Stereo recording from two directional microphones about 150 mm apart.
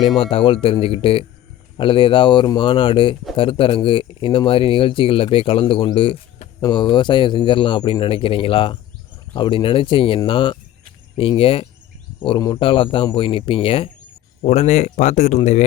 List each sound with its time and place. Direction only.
0.0 s speech: 35° left (ahead or behind)
14.4 s speech: 50° left (ahead or behind)